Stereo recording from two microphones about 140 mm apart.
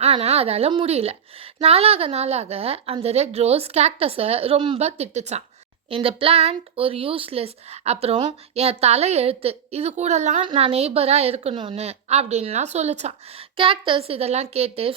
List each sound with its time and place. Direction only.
0.0 s a woman's voice: 45° right (ahead or behind)
5.9 s a woman's voice: 40° right (ahead or behind); by 10.4 s 60° right (ahead or behind)
10.4 s a woman's voice: 45° right (ahead or behind)
13.6 s a woman's voice: 40° right (ahead or behind)